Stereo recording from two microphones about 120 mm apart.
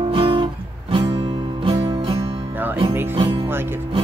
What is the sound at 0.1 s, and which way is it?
Music, 45° right (ahead or behind).